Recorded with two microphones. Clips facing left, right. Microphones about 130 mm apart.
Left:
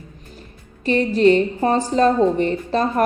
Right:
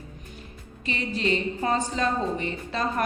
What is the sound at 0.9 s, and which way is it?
A woman's voice, 45° left (ahead or behind).